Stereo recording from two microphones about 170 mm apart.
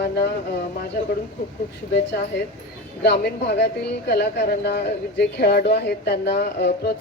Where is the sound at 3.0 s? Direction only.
70° left (ahead or behind).